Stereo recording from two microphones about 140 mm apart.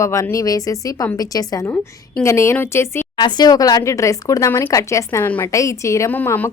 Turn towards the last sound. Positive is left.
turn(degrees=15)  # may be behind; listen again after turning